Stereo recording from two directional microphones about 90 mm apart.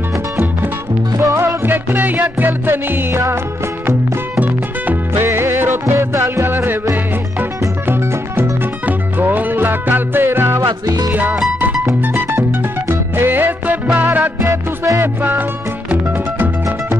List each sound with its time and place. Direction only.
1.1 s music: 35° right (ahead or behind)
4.4 s music: 20° right (ahead or behind)
10.9 s music: 45° right (ahead or behind)
12.0 s music: 30° right (ahead or behind)
14.4 s music: 40° right (ahead or behind)
15.0 s music: 20° right (ahead or behind)